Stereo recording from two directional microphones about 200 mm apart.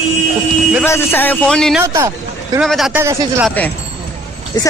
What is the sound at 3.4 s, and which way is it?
Speech, 10° left (ahead or behind).